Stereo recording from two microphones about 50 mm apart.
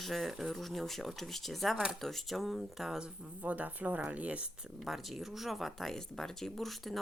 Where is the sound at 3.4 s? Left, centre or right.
Right.